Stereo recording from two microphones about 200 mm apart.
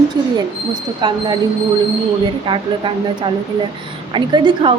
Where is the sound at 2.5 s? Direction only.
25° right (ahead or behind).